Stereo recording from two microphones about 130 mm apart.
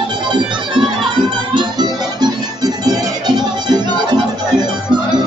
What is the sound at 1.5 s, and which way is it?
Music, 35° right (ahead or behind).